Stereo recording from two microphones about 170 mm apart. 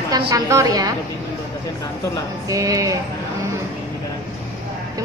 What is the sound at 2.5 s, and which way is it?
Speech, 20° right (ahead or behind).